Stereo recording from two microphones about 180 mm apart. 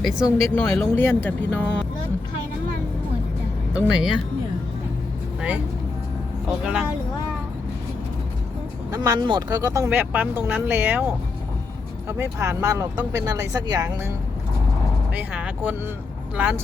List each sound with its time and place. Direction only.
0.0 s speech: centre (ahead or behind)
0.5 s speech: 10° left (ahead or behind)
3.7 s speech: 5° right (ahead or behind)
6.5 s speech: 5° right (ahead or behind)
8.9 s speech: 20° right (ahead or behind)
15.1 s speech: 5° right (ahead or behind)